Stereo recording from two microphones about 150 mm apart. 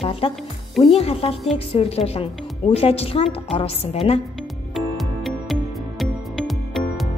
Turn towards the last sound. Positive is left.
turn(degrees=0)  # may be behind; listen again after turning